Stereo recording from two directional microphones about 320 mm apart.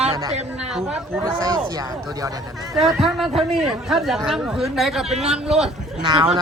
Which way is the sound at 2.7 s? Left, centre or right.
Centre.